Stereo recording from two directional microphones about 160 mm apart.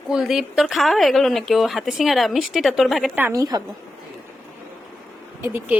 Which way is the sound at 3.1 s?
15° right (ahead or behind).